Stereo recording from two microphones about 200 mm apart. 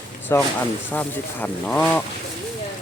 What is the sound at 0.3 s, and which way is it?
Speech, 15° left (ahead or behind).